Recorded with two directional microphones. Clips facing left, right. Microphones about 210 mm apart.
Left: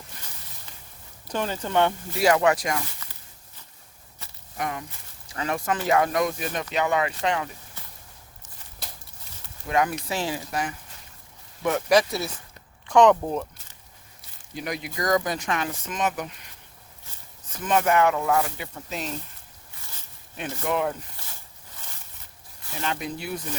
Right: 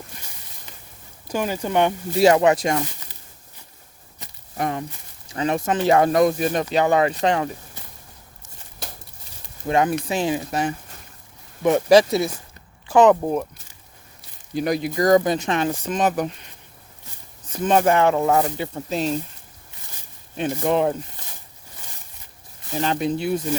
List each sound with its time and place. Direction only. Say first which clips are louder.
1.3 s speech: right 4 dB; 10° right (ahead or behind)
2.1 s speech: right 5 dB; 25° right (ahead or behind)
4.2 s a sound: right 4 dB; 15° right (ahead or behind)
4.5 s speech: right 6 dB; 35° right (ahead or behind)
5.3 s speech: right 5 dB; 20° right (ahead or behind); by 7.5 s 40° right (ahead or behind)
8.8 s a sound: right 6 dB; 50° right (ahead or behind)
9.6 s speech: right 5 dB; 30° right (ahead or behind)
12.9 s speech: right 3 dB; 5° right (ahead or behind)
14.5 s speech: right 10 dB; 35° right (ahead or behind)
17.5 s speech: right 4 dB; 30° right (ahead or behind)
20.7 s speech: right 5 dB; 30° right (ahead or behind)
22.7 s speech: right 8 dB; 35° right (ahead or behind)